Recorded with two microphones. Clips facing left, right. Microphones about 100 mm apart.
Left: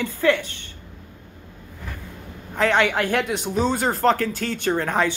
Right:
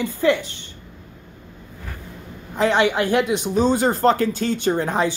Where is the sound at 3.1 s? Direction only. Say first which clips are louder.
Right 4 dB; 50° left (ahead or behind).